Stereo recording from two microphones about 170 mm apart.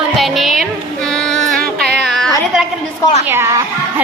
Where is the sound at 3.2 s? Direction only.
15° right (ahead or behind).